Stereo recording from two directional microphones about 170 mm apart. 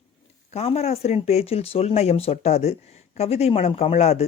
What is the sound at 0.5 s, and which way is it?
Speech, 40° left (ahead or behind).